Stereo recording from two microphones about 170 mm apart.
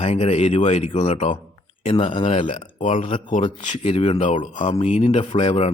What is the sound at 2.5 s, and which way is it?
Speech, 45° left (ahead or behind).